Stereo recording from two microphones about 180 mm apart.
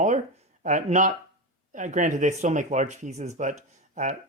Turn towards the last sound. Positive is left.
turn(degrees=-45)  # may be behind; listen again after turning